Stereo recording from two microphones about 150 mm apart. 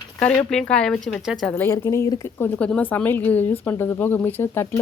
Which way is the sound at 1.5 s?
15° left (ahead or behind).